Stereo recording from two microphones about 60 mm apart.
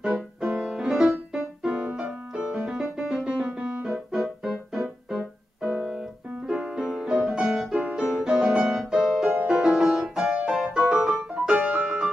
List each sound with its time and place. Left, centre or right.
0.0 s music: centre
2.3 s piano: centre
2.6 s music: centre
3.4 s music: centre
3.9 s music: centre
9.3 s music: centre
9.7 s music: centre